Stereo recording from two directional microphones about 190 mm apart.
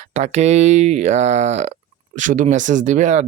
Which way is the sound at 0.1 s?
35° right (ahead or behind).